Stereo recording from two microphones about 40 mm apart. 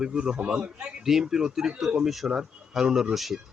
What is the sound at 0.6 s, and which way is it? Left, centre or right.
Speech, right.